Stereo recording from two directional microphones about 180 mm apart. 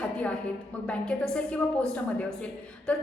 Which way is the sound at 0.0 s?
5° left (ahead or behind).